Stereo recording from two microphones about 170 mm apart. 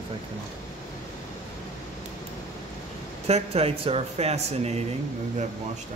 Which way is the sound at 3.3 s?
35° right (ahead or behind).